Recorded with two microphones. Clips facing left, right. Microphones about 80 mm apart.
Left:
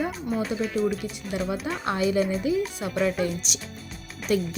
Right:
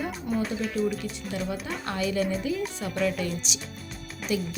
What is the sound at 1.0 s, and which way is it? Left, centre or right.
Speech, centre.